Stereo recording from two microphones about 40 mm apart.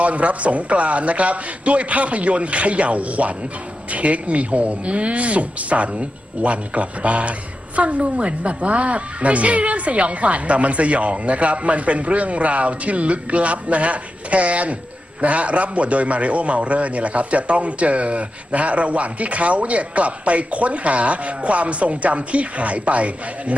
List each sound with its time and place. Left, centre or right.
0.0 s a man's voice: right